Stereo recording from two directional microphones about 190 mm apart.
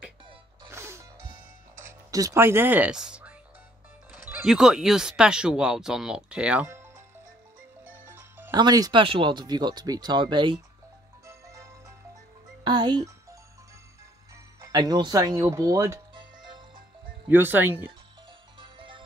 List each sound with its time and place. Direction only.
0.7 s music: 15° right (ahead or behind)
2.0 s speech: 20° right (ahead or behind)
7.8 s music: 10° right (ahead or behind)
8.5 s speech: 20° right (ahead or behind)
11.2 s music: 15° right (ahead or behind)
12.6 s a child's voice: 25° right (ahead or behind)
14.7 s speech: 20° right (ahead or behind)
17.3 s speech: 10° right (ahead or behind)
18.6 s music: 25° right (ahead or behind)